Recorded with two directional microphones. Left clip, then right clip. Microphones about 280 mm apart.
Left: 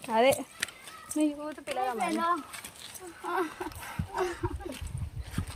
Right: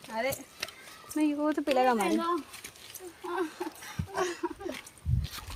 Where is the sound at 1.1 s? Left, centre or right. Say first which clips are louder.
Even; centre.